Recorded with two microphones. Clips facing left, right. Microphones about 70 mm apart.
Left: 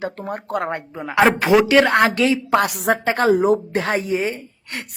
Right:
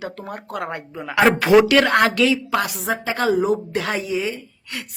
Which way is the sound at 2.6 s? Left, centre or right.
Left.